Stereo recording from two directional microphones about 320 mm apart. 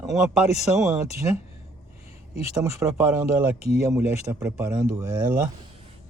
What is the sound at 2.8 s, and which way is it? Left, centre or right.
Speech, centre.